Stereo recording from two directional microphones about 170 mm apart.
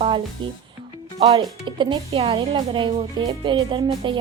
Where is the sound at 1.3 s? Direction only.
30° right (ahead or behind).